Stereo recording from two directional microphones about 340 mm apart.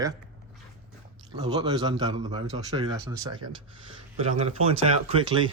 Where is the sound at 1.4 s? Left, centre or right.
Centre.